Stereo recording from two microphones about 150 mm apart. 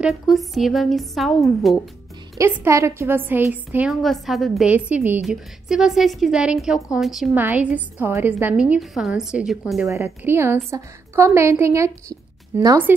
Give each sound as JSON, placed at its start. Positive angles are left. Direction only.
{"t": 0.0, "sound": "a woman's voice", "side_deg": 0}
{"t": 2.3, "sound": "a woman's voice", "side_deg": -20}
{"t": 3.9, "sound": "a woman's voice", "side_deg": 0}
{"t": 9.8, "sound": "a woman's voice", "side_deg": -20}